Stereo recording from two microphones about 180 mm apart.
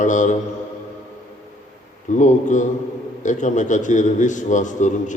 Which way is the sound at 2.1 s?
45° left (ahead or behind).